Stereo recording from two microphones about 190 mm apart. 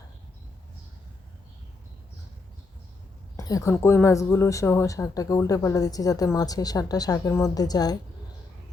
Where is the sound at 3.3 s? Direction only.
20° left (ahead or behind).